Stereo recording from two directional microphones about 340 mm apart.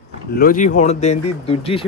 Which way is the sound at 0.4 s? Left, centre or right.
Left.